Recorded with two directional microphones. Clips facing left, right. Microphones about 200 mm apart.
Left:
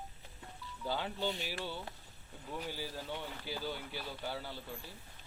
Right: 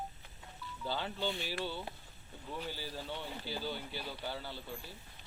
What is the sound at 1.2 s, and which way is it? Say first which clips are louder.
Speech: even; 40° left (ahead or behind).